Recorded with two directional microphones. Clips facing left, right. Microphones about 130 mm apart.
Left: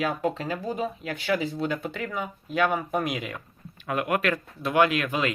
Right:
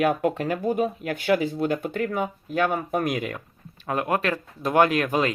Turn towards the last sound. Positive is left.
turn(degrees=-40)  # may be behind; listen again after turning